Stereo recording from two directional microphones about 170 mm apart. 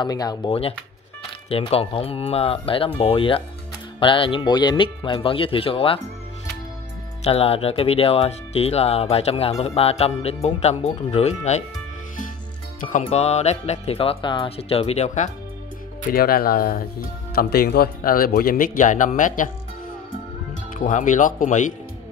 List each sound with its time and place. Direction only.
0.0 s speech: 25° left (ahead or behind)
7.2 s speech: 35° left (ahead or behind)
12.9 s speech: 40° left (ahead or behind)
16.1 s speech: 60° left (ahead or behind)
20.8 s speech: 50° left (ahead or behind)